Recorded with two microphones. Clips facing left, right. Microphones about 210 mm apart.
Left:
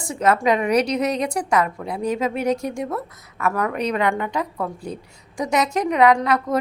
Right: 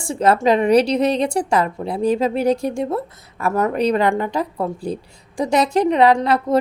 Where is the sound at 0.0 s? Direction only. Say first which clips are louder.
Right 3 dB; 30° right (ahead or behind).